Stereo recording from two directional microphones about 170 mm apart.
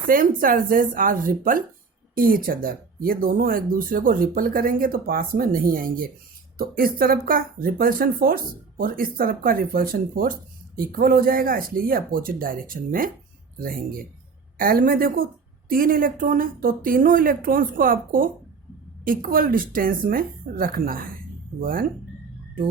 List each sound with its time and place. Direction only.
0.1 s speech: 55° right (ahead or behind)